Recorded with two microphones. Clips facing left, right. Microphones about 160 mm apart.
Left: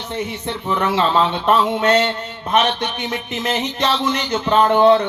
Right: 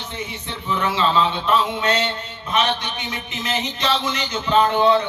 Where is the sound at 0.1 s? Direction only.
60° left (ahead or behind).